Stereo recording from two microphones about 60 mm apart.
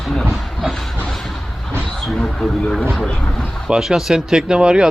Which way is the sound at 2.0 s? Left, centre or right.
Centre.